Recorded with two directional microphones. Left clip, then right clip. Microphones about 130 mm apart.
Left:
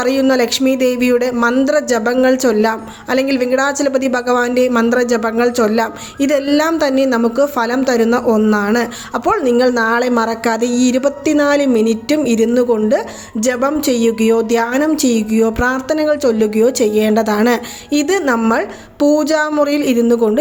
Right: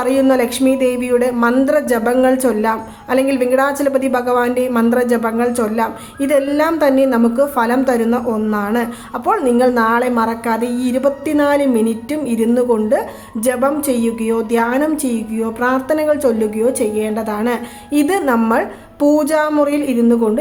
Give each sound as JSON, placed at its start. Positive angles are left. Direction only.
{"t": 0.0, "sound": "a woman's voice", "side_deg": 30}
{"t": 17.9, "sound": "a woman's voice", "side_deg": 30}